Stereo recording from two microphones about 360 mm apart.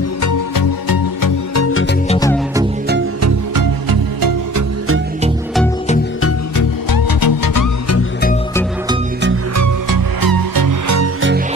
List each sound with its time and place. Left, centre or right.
0.2 s music: left
1.5 s music: left
2.0 s music: centre
3.2 s music: right
3.6 s music: right
6.5 s music: left
9.6 s music: right